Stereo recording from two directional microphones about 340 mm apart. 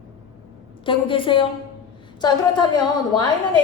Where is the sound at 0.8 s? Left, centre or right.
Centre.